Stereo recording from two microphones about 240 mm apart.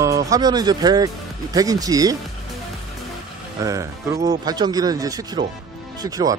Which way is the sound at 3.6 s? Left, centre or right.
Centre.